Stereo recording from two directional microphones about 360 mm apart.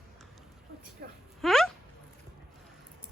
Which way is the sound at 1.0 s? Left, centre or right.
Right.